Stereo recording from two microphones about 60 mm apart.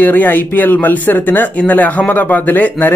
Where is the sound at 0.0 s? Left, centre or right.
Left.